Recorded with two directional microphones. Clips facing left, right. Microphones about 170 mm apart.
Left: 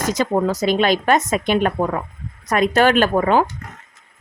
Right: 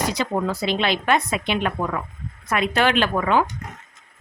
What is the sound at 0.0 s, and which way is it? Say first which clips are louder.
Speech: left 4 dB; 45° left (ahead or behind).